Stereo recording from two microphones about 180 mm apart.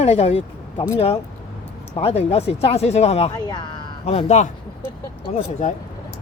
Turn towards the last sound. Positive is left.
turn(degrees=40)  # may be behind; listen again after turning